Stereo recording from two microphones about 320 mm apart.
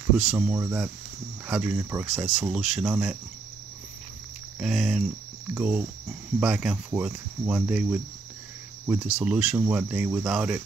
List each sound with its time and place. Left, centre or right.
0.2 s speech: centre
4.6 s speech: centre